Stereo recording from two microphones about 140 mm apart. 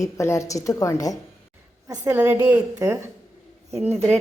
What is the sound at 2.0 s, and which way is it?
Speech, 15° right (ahead or behind).